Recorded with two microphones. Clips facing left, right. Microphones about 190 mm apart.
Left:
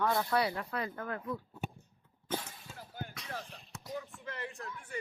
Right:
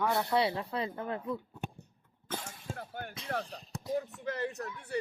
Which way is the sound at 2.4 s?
50° right (ahead or behind).